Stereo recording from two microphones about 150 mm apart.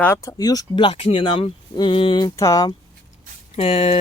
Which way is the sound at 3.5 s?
40° left (ahead or behind).